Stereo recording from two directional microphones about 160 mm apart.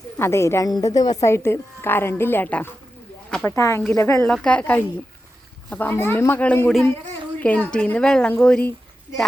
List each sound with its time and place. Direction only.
0.2 s a woman's voice: 15° left (ahead or behind)
3.5 s a woman's voice: 20° left (ahead or behind)